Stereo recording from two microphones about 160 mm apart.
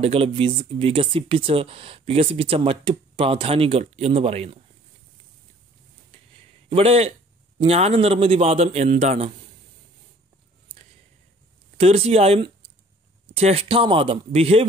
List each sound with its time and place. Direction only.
0.0 s speech: 35° right (ahead or behind)
6.7 s speech: 40° right (ahead or behind)
11.7 s speech: 40° right (ahead or behind)